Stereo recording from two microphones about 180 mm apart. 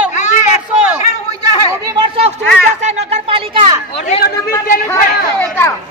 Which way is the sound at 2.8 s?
35° right (ahead or behind).